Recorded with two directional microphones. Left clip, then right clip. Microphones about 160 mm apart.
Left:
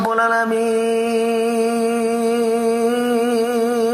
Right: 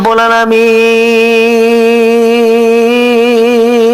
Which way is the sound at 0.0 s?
35° right (ahead or behind).